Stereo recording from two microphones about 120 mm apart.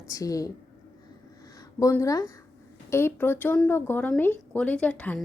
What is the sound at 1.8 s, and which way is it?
A woman's voice, 25° left (ahead or behind).